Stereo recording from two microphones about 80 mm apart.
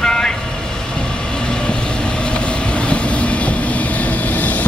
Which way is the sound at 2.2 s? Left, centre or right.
Centre.